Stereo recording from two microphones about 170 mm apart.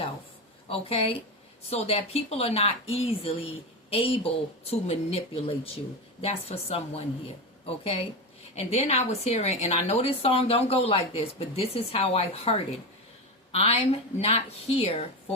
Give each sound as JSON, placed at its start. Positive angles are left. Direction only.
{"t": 0.7, "sound": "a woman's voice", "side_deg": 35}
{"t": 8.5, "sound": "a woman's voice", "side_deg": 40}